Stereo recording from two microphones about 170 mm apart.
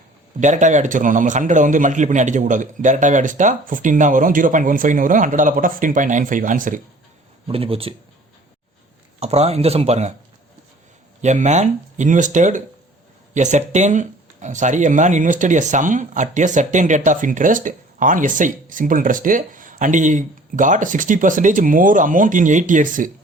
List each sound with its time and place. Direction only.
0.3 s speech: 45° right (ahead or behind)
7.4 s speech: 35° right (ahead or behind)
9.2 s speech: 40° right (ahead or behind)
11.2 s speech: 45° right (ahead or behind)